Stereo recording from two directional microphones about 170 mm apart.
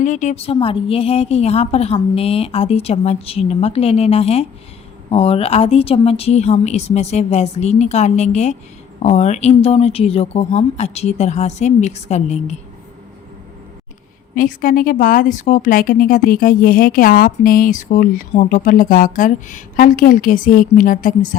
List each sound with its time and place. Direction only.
0.0 s a woman's voice: 45° left (ahead or behind)
14.3 s speech: 55° left (ahead or behind)